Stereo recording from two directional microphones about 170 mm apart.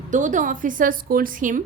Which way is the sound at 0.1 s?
50° right (ahead or behind).